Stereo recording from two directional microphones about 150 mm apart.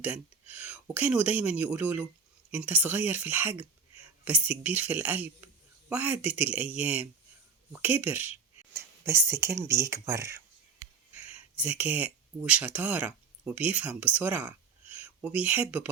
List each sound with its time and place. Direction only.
0.0 s speech: 10° right (ahead or behind)
11.2 s speech: 10° right (ahead or behind)